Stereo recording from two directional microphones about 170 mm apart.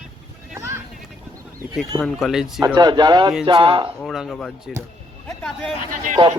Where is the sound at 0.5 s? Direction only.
15° right (ahead or behind).